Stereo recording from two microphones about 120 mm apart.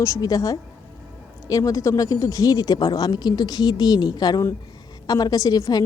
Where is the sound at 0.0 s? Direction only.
30° left (ahead or behind).